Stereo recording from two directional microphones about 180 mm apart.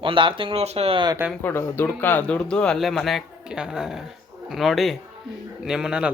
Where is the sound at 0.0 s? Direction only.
30° right (ahead or behind).